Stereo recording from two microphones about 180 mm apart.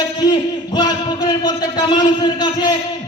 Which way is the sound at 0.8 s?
25° left (ahead or behind).